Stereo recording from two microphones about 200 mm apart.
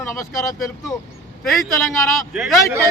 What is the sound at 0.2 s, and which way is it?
Speech, 15° left (ahead or behind).